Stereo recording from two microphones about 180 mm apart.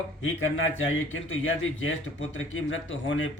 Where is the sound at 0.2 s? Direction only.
90° left.